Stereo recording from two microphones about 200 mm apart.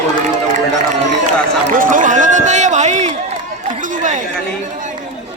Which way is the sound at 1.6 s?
40° right (ahead or behind).